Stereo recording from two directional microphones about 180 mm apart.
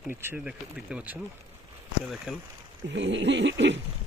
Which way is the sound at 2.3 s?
5° right (ahead or behind).